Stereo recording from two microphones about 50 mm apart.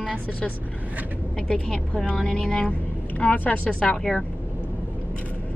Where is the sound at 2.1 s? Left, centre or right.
Centre.